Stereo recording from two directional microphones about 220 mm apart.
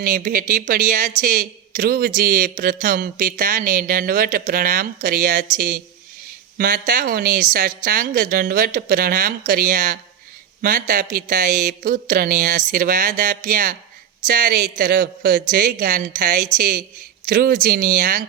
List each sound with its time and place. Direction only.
0.0 s speech: 40° right (ahead or behind)